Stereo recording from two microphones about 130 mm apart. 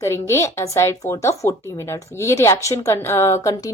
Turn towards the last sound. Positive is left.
turn(degrees=25)  # may be behind; listen again after turning